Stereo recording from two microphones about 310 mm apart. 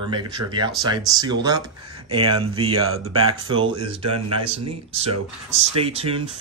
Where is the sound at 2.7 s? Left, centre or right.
Right.